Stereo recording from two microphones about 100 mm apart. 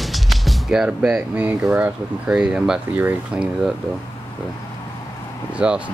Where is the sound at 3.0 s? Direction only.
20° right (ahead or behind).